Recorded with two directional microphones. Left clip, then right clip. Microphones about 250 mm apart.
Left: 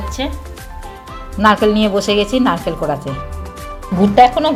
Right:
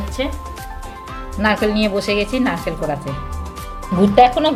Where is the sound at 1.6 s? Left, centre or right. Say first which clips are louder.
Left 4 dB; left.